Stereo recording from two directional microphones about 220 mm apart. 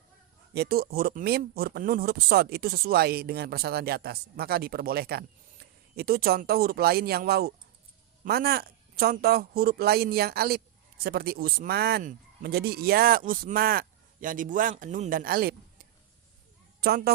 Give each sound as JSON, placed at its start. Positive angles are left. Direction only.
{"t": 0.5, "sound": "speech", "side_deg": -45}
{"t": 16.8, "sound": "speech", "side_deg": -45}